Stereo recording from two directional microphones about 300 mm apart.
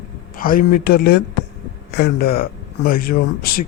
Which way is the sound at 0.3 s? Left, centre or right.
Left.